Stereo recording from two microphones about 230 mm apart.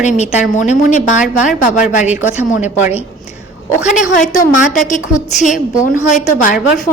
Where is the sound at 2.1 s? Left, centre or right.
Centre.